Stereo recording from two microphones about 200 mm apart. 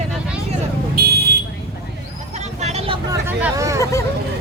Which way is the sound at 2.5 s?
35° right (ahead or behind).